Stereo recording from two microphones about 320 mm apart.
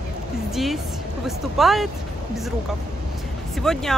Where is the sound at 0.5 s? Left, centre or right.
Centre.